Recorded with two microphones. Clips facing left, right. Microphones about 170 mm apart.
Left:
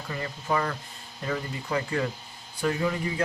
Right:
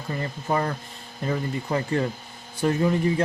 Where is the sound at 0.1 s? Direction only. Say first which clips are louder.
Right 3 dB; 35° right (ahead or behind).